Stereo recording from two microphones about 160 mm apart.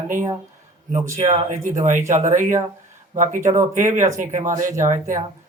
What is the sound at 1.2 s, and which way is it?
Speech, 50° right (ahead or behind).